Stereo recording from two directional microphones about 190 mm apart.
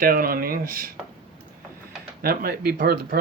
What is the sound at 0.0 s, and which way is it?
Speech, 50° right (ahead or behind).